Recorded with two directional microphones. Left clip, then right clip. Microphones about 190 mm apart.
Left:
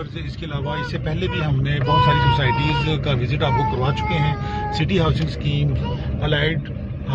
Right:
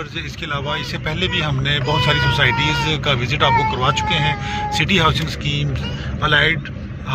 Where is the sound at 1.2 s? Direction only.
10° left (ahead or behind).